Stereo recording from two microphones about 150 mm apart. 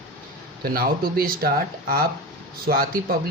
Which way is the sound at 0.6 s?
80° right.